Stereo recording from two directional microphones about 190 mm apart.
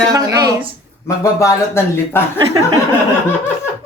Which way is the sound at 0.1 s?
20° right (ahead or behind).